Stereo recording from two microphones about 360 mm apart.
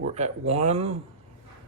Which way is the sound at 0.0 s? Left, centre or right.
Centre.